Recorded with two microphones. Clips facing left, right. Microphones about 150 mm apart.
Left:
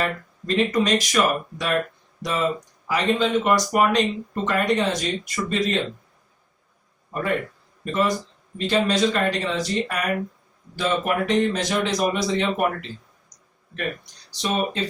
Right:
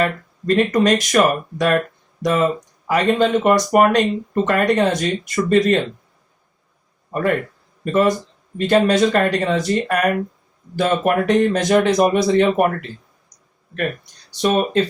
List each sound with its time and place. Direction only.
0.0 s speech: 55° right (ahead or behind)
7.1 s speech: 55° right (ahead or behind)
8.5 s speech: 55° right (ahead or behind)
13.7 s speech: 55° right (ahead or behind)